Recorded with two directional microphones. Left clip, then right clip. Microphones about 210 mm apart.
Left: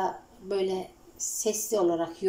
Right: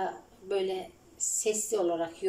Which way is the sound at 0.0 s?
Centre (ahead or behind).